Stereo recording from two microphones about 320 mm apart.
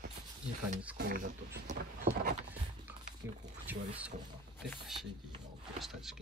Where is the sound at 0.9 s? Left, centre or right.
Right.